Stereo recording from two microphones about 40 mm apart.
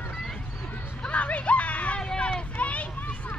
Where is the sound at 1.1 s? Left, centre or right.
Left.